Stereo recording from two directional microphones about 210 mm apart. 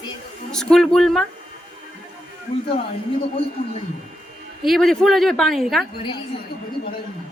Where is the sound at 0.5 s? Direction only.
Centre (ahead or behind).